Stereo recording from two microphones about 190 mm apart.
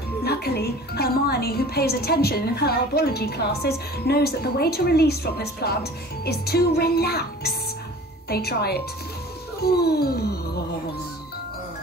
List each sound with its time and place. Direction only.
0.2 s speech: 55° left (ahead or behind)